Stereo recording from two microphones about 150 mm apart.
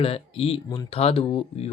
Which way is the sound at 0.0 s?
40° left (ahead or behind).